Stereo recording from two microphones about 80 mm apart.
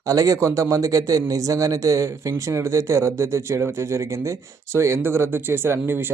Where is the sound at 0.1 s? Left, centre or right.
Right.